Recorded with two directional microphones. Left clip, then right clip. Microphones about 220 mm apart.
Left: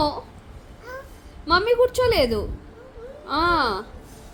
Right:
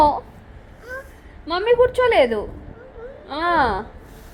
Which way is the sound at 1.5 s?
30° left (ahead or behind).